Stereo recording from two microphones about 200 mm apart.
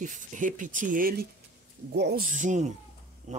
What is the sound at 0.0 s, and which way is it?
Speech, 40° right (ahead or behind).